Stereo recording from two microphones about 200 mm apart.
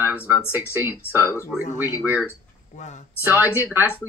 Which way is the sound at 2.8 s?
35° left (ahead or behind).